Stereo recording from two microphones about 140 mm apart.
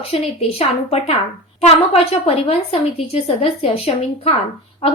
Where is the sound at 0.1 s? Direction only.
45° left (ahead or behind).